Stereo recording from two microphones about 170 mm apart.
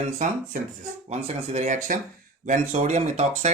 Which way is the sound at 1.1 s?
40° right (ahead or behind).